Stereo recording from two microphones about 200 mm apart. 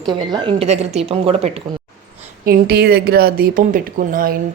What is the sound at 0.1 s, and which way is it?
A woman's voice, 20° right (ahead or behind).